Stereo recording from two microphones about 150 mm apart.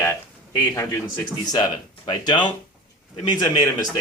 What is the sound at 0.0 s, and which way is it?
Speech, 20° left (ahead or behind).